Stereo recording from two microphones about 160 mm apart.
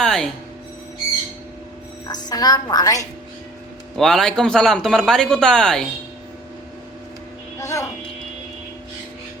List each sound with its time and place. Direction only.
0.0 s music: 5° left (ahead or behind)
2.0 s a woman's voice: 25° left (ahead or behind)
3.9 s a man's voice: 5° left (ahead or behind)
7.6 s speech: 20° left (ahead or behind)